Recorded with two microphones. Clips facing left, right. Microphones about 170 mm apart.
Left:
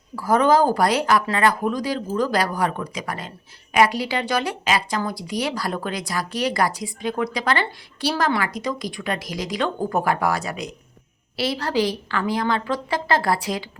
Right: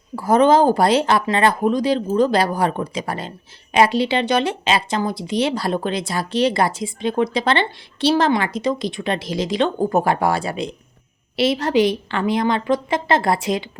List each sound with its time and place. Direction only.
0.2 s speech: 20° right (ahead or behind)